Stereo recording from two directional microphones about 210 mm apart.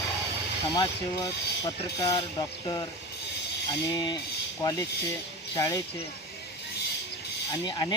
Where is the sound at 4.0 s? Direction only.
20° left (ahead or behind).